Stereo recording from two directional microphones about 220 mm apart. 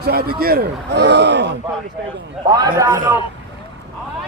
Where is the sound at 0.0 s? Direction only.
45° right (ahead or behind).